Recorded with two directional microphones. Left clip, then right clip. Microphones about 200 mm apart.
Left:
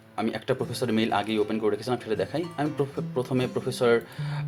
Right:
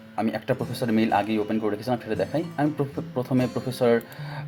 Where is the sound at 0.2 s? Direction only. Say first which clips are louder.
Right 1 dB; 15° left (ahead or behind).